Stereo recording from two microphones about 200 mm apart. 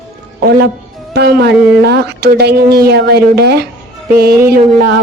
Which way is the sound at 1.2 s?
55° right (ahead or behind).